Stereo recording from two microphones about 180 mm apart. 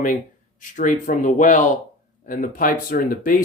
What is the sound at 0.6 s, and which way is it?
Speech, 45° left (ahead or behind).